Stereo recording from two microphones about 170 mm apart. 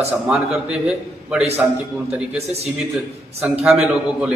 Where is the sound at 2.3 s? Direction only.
40° right (ahead or behind).